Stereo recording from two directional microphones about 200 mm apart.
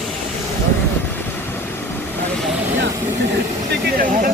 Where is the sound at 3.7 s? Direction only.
45° right (ahead or behind).